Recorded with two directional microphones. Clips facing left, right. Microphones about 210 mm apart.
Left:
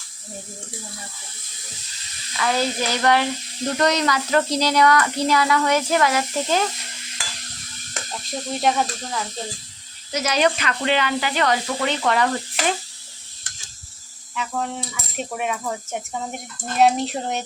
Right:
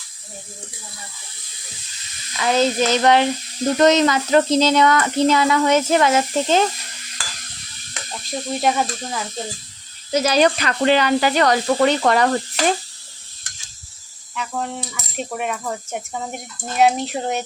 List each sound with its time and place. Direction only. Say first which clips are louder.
2.4 s speech: right 5 dB; 20° right (ahead or behind)
8.0 s sizzle: left 2 dB; 45° left (ahead or behind)
8.5 s speech: right 1 dB; 5° right (ahead or behind)
10.1 s speech: right 4 dB; 30° right (ahead or behind)
14.3 s speech: even; centre (ahead or behind)